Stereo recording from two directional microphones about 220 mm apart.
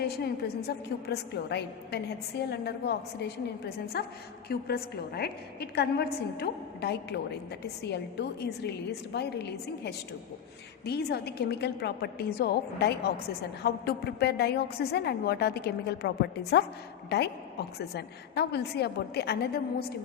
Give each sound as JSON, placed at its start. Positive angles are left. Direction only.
{"t": 0.0, "sound": "a woman's voice", "side_deg": 45}